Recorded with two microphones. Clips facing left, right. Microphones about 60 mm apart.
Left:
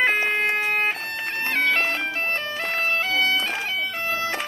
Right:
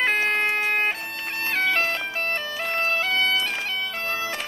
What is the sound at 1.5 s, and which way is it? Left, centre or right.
Bagpipes, centre.